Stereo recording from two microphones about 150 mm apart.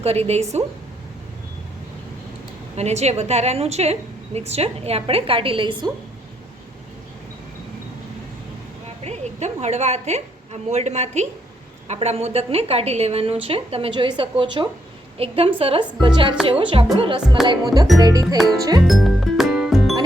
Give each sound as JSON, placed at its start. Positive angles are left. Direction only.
{"t": 0.0, "sound": "a woman's voice", "side_deg": -45}
{"t": 2.7, "sound": "a woman's voice", "side_deg": -45}
{"t": 9.0, "sound": "a woman's voice", "side_deg": -45}
{"t": 17.4, "sound": "music", "side_deg": 0}
{"t": 17.9, "sound": "music", "side_deg": -25}
{"t": 18.9, "sound": "music", "side_deg": 0}